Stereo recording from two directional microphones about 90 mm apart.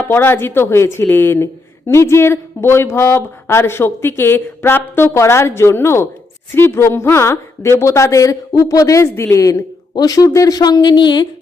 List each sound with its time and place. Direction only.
0.0 s a woman's voice: 25° left (ahead or behind); by 11.3 s 55° left (ahead or behind)